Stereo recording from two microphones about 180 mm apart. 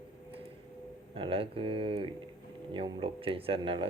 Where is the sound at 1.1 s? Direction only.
30° right (ahead or behind).